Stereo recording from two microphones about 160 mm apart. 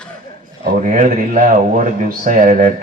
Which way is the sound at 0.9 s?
55° right (ahead or behind).